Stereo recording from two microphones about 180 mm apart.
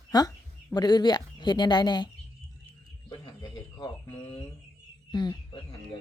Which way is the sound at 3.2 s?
20° left (ahead or behind).